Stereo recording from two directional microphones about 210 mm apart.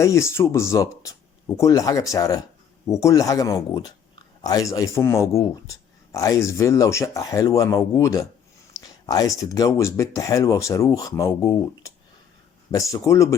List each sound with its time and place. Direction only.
0.0 s speech: 15° left (ahead or behind)